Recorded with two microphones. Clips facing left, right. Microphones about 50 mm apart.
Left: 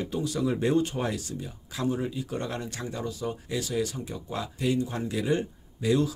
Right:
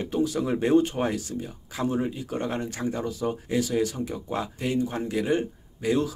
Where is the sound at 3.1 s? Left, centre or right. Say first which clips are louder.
Right 5 dB; right.